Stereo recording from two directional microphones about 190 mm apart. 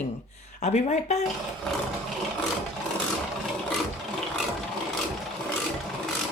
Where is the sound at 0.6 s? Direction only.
40° left (ahead or behind).